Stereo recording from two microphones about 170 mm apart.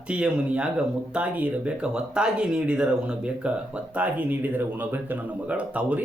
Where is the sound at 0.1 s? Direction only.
5° right (ahead or behind).